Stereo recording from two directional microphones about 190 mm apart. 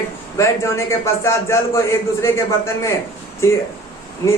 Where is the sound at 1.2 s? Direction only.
15° left (ahead or behind).